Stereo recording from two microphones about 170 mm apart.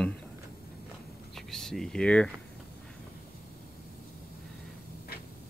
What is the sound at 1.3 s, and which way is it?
Speech, 5° left (ahead or behind).